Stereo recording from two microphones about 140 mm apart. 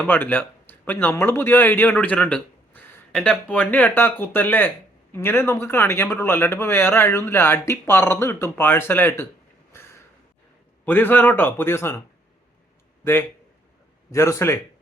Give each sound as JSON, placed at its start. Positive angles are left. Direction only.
{"t": 0.0, "sound": "speech", "side_deg": 10}
{"t": 9.7, "sound": "a sound", "side_deg": 20}
{"t": 10.8, "sound": "speech", "side_deg": 10}
{"t": 14.1, "sound": "a man's voice", "side_deg": 20}